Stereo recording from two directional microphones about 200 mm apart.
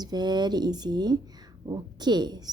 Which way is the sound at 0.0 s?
20° right (ahead or behind).